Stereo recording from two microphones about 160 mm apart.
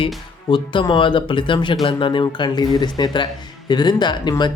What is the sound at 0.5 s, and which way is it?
Speech, 30° left (ahead or behind).